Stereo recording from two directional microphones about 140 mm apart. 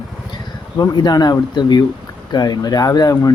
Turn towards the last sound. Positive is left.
turn(degrees=25)  # may be behind; listen again after turning